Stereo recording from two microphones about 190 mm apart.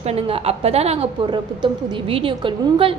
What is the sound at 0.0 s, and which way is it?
A woman's voice, 30° right (ahead or behind).